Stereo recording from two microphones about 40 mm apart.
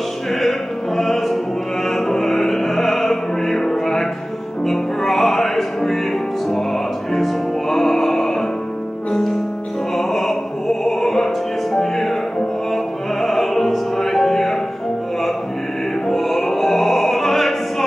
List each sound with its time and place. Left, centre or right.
0.3 s opera: centre
1.9 s music: centre
9.9 s music: centre
16.1 s opera: centre